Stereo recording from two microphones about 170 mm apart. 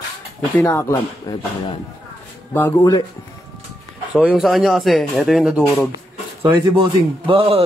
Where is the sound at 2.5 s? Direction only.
15° left (ahead or behind).